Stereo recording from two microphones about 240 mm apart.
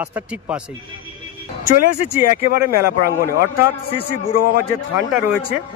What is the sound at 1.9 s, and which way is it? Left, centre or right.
Speech, left.